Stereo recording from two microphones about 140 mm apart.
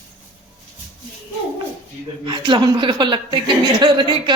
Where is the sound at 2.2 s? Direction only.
35° right (ahead or behind).